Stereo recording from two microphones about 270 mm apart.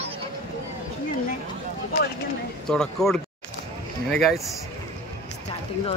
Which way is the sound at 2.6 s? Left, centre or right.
Centre.